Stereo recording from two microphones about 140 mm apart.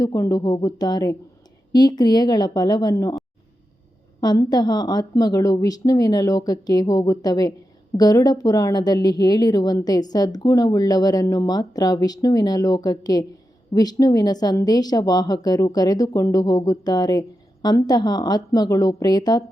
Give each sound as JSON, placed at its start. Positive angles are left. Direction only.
{"t": 0.0, "sound": "speech", "side_deg": 25}
{"t": 4.2, "sound": "speech", "side_deg": 30}